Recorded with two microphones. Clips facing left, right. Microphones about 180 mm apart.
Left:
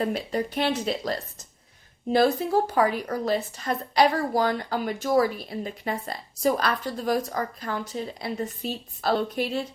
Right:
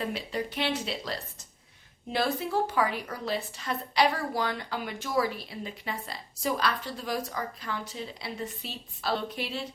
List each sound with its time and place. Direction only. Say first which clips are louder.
0.0 s a woman's voice: left 6 dB; 45° left (ahead or behind)